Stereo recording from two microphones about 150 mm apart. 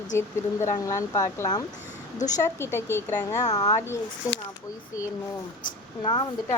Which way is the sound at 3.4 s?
25° left (ahead or behind).